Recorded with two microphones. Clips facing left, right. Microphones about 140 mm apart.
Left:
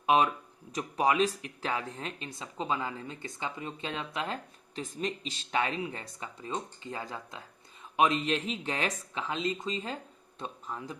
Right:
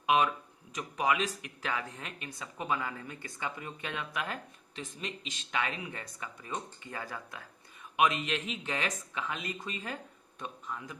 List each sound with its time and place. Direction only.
0.0 s speech: 30° left (ahead or behind)